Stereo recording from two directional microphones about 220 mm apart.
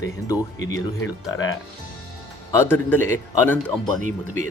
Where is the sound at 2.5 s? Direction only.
10° left (ahead or behind).